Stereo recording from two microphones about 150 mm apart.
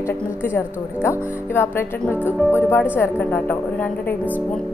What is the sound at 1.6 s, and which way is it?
A woman's voice, 15° left (ahead or behind).